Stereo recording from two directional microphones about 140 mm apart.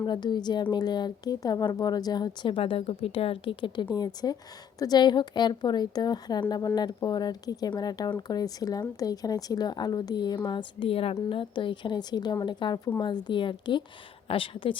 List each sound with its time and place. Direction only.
0.0 s speech: 30° left (ahead or behind)